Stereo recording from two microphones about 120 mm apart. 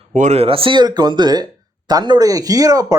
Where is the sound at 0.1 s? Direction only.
80° right.